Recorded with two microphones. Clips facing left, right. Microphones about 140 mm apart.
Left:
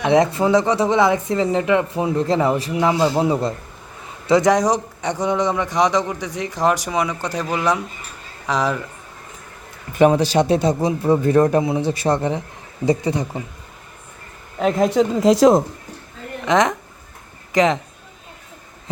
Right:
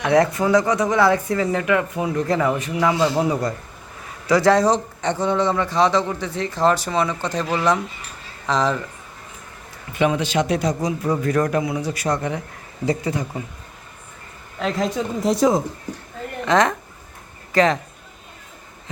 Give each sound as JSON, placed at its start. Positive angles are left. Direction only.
{"t": 0.0, "sound": "a man's voice", "side_deg": 20}
{"t": 9.9, "sound": "speech", "side_deg": 40}
{"t": 14.6, "sound": "a woman's voice", "side_deg": 50}
{"t": 14.9, "sound": "a woman's voice", "side_deg": 90}
{"t": 16.5, "sound": "a man's voice", "side_deg": 20}